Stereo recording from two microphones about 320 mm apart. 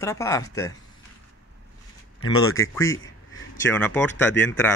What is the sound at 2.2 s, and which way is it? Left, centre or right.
Speech, left.